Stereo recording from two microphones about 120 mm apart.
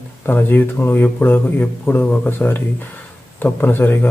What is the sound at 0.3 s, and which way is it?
Speech, 15° left (ahead or behind).